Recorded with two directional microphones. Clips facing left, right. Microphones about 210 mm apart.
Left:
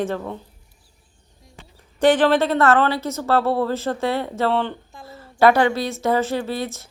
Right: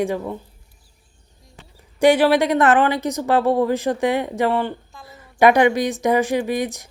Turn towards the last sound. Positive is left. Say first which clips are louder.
# right 4 dB
turn(degrees=-15)  # may be behind; listen again after turning